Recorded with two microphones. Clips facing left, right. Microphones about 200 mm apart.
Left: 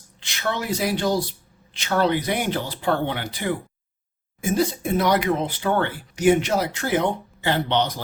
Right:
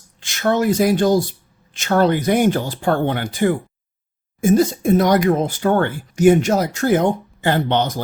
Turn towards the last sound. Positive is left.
turn(degrees=-50)  # may be behind; listen again after turning